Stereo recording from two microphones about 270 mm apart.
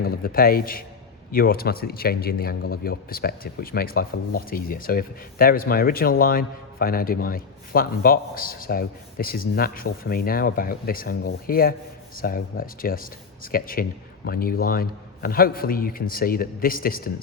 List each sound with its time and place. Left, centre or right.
0.0 s speech: left